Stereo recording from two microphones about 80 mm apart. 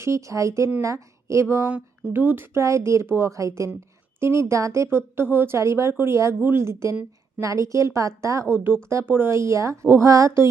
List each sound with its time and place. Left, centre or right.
0.0 s a woman's voice: right
1.6 s a woman's voice: right
8.5 s speech: right
9.3 s a woman's voice: right